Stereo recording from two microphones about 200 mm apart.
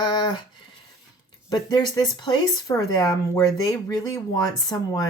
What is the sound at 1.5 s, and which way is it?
Speech, 20° left (ahead or behind).